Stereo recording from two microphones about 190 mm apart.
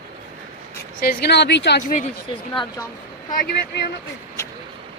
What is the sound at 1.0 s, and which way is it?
Speech, 60° left (ahead or behind).